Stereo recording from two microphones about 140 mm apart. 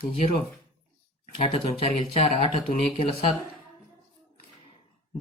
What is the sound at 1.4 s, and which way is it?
Speech, 45° left (ahead or behind).